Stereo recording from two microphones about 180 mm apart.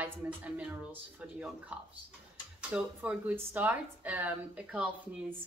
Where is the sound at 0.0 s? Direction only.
10° right (ahead or behind).